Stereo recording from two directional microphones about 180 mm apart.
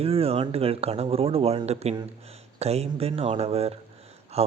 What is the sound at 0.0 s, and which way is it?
Speech, 35° right (ahead or behind).